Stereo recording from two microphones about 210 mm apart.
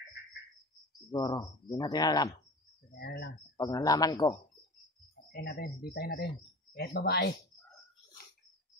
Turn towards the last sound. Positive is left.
turn(degrees=50)  # may be behind; listen again after turning